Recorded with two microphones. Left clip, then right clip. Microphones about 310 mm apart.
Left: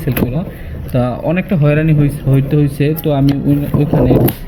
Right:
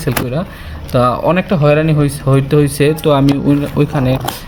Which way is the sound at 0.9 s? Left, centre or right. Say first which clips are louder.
Right 5 dB; centre.